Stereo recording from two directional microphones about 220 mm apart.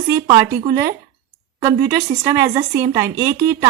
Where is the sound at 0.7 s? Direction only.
15° right (ahead or behind).